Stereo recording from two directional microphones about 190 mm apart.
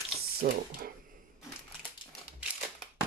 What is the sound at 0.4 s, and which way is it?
Speech, 50° right (ahead or behind).